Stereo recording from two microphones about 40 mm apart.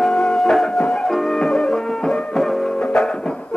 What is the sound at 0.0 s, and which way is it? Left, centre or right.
Music, centre.